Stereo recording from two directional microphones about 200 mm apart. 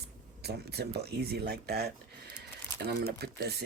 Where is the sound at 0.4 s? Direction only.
55° right (ahead or behind).